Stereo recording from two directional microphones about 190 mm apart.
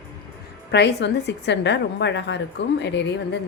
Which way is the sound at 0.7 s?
65° left (ahead or behind).